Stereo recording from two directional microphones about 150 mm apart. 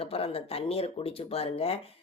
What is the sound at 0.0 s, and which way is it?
Speech, 40° left (ahead or behind).